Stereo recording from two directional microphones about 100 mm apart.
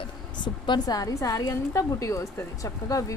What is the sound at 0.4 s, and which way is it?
Speech, 45° left (ahead or behind).